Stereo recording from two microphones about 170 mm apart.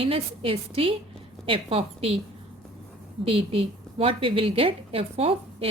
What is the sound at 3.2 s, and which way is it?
A woman's voice, 30° right (ahead or behind).